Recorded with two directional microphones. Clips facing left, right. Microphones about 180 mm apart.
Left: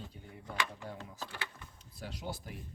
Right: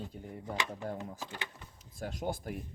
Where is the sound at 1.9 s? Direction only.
45° right (ahead or behind).